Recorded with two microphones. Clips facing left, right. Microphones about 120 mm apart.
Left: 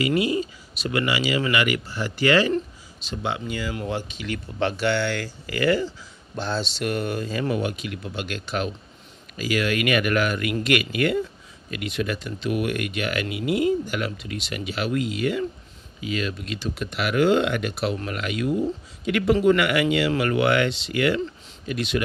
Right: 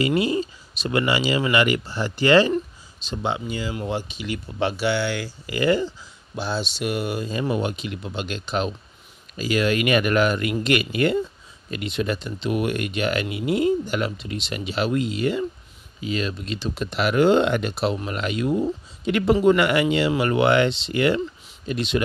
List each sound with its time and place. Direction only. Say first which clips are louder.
0.0 s speech: right 1 dB; 30° right (ahead or behind)
6.3 s speech: even; 5° right (ahead or behind); by 22.0 s 25° right (ahead or behind)